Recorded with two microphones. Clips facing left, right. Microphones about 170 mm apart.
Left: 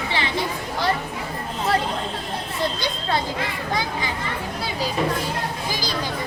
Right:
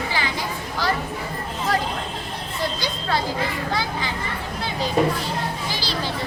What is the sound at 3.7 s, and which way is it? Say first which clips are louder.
Speech: even; 20° left (ahead or behind).